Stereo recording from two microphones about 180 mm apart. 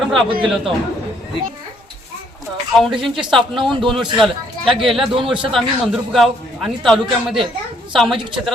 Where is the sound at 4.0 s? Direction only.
25° right (ahead or behind).